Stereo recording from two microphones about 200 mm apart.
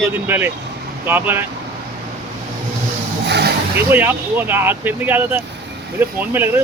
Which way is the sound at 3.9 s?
10° right (ahead or behind).